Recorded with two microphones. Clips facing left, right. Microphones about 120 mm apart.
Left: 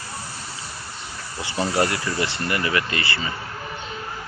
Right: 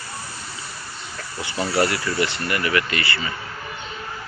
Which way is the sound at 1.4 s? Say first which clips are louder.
Right 1 dB; 25° left (ahead or behind).